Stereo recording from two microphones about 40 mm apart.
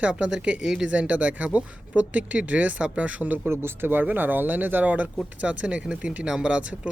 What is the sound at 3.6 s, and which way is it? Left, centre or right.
Speech, right.